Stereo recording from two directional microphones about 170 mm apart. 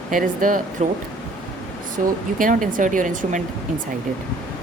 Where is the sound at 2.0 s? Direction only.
50° right (ahead or behind).